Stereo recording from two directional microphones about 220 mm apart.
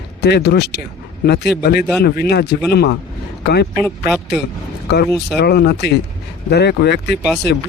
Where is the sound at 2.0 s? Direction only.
45° left (ahead or behind).